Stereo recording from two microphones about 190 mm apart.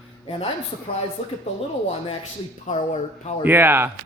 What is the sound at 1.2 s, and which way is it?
Speech, 30° left (ahead or behind).